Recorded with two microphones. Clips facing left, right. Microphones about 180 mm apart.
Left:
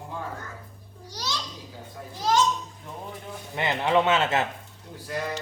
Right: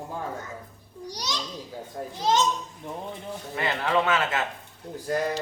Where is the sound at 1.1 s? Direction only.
15° right (ahead or behind).